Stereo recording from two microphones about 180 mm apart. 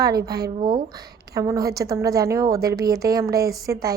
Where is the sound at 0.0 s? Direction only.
20° right (ahead or behind).